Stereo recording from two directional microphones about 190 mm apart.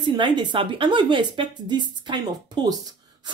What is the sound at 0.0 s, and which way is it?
A woman's voice, 25° right (ahead or behind).